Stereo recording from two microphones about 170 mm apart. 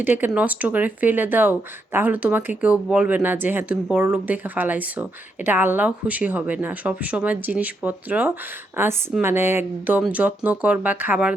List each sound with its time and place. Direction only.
0.0 s speech: 10° right (ahead or behind)